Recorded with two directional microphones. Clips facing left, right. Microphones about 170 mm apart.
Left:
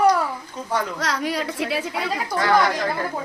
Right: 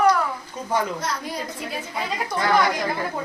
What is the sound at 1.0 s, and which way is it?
Speech, 80° left.